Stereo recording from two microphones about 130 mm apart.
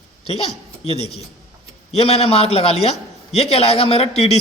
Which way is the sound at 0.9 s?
55° left (ahead or behind).